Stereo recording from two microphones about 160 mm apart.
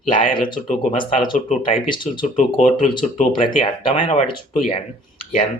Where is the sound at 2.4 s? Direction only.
50° left (ahead or behind).